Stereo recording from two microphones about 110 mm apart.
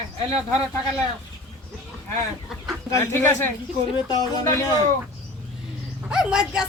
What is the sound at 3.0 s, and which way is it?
Speech, 20° left (ahead or behind).